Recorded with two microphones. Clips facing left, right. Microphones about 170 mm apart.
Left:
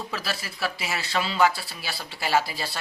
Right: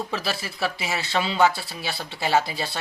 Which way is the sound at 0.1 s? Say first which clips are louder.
Right 4 dB; 25° right (ahead or behind).